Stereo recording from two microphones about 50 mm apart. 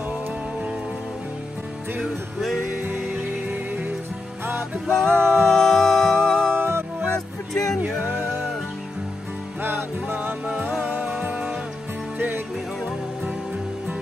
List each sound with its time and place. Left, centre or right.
2.8 s music: right
4.8 s music: centre
6.5 s music: right
7.5 s music: centre
7.8 s music: right
9.6 s music: right